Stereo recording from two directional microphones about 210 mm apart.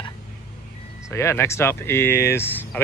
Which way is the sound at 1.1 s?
15° left (ahead or behind).